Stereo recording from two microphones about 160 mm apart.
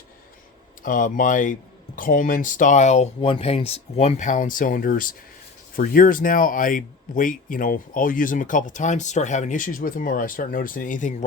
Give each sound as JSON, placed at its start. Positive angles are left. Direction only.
{"t": 0.8, "sound": "speech", "side_deg": 55}